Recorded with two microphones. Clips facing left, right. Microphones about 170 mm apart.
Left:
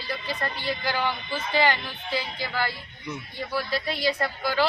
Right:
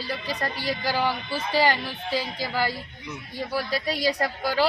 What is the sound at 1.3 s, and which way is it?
Speech, 40° right (ahead or behind).